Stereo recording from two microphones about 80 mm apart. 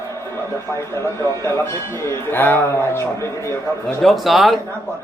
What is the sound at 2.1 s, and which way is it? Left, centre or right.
A man's voice, left.